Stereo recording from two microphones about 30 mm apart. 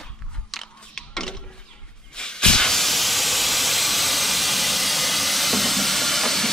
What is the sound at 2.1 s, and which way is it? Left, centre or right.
Hiss, left.